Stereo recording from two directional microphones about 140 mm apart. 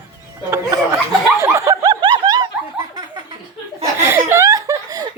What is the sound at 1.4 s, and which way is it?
Snicker, 20° right (ahead or behind).